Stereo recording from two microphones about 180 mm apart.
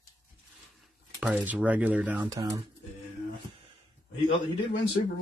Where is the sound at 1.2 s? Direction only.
10° right (ahead or behind).